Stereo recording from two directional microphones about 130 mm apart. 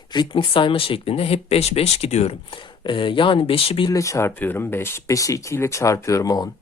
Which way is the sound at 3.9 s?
25° left (ahead or behind).